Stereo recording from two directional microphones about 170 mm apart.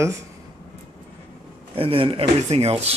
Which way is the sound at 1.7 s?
30° right (ahead or behind).